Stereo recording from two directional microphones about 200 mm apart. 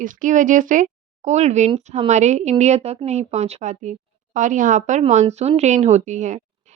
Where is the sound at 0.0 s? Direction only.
40° right (ahead or behind).